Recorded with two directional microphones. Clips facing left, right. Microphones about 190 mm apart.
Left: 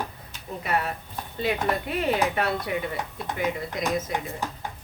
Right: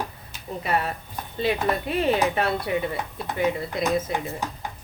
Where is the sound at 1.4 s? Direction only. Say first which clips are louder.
Right 2 dB; 25° right (ahead or behind).